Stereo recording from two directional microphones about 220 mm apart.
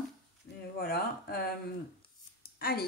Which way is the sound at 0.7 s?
45° left (ahead or behind).